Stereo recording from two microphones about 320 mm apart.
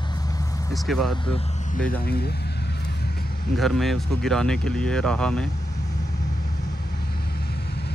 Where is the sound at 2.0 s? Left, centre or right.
Left.